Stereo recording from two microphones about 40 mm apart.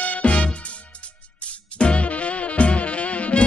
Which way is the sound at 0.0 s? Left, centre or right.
Left.